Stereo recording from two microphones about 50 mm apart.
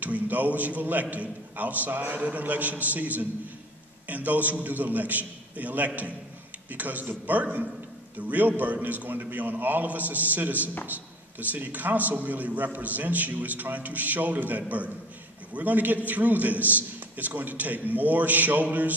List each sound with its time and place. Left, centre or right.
0.0 s a man's voice: right